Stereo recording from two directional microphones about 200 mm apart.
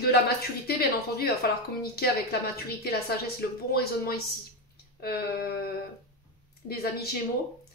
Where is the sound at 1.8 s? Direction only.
50° left (ahead or behind).